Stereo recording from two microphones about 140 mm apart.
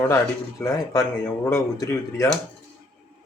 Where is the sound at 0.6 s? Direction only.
20° left (ahead or behind).